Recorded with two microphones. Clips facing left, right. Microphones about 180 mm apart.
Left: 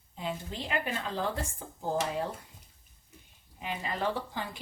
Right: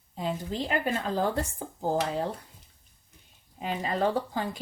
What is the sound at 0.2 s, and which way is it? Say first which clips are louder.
Speech: right 6 dB; 40° right (ahead or behind).